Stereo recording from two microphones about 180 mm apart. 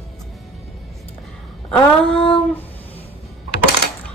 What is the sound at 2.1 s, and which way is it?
Child singing, 30° left (ahead or behind).